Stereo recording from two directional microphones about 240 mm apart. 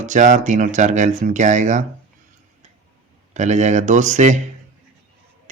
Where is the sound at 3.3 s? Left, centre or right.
Right.